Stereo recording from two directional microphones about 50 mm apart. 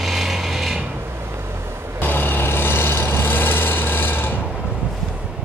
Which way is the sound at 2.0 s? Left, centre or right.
Left.